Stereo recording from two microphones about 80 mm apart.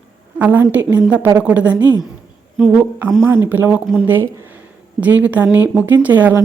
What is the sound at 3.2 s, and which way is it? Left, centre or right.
Speech, right.